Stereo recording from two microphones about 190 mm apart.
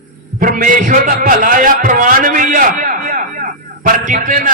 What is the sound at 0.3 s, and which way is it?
A man's voice, 45° right (ahead or behind).